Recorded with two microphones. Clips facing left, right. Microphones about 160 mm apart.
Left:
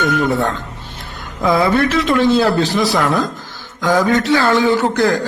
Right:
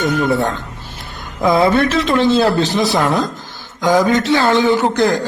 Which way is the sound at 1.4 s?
20° right (ahead or behind).